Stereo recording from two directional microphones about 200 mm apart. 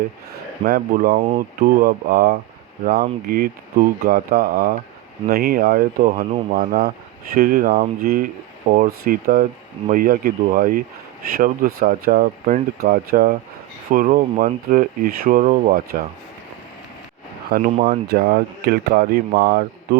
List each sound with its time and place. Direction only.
0.7 s speech: 50° right (ahead or behind); by 6.6 s 35° right (ahead or behind)
6.6 s speech: 50° right (ahead or behind)
17.5 s speech: 45° right (ahead or behind)